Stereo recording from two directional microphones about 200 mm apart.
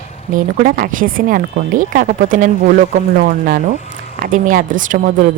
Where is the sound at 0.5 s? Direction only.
45° right (ahead or behind).